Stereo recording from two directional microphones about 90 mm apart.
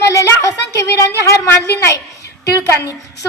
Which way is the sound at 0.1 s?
35° left (ahead or behind).